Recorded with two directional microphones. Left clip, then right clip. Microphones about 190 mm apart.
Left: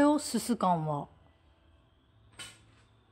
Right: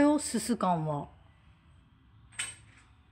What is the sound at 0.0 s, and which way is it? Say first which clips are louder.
Speech: even; 10° left (ahead or behind).